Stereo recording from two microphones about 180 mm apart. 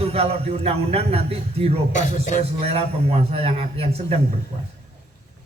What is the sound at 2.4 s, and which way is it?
A man's voice, 35° right (ahead or behind).